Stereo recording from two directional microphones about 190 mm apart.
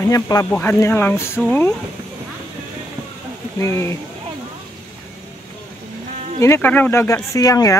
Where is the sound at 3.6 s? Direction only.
15° left (ahead or behind).